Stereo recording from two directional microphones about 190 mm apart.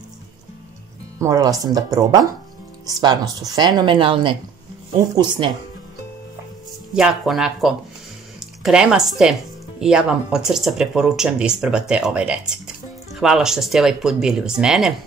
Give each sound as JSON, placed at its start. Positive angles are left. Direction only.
{"t": 1.2, "sound": "a woman's voice", "side_deg": -20}
{"t": 6.9, "sound": "speech", "side_deg": -5}